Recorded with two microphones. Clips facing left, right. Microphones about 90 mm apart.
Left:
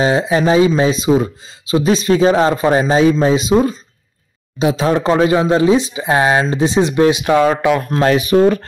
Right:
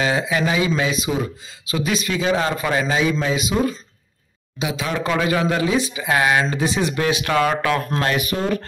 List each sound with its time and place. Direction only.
0.0 s speech: 30° left (ahead or behind)